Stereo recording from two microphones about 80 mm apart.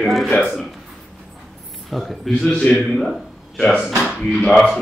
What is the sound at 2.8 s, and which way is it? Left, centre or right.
Speech, centre.